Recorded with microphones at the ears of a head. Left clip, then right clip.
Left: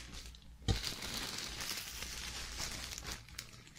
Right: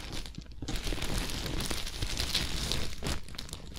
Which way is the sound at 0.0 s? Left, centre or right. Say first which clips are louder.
Right 9 dB; right.